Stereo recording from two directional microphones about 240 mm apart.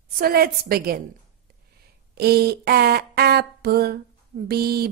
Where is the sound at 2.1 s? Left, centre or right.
Right.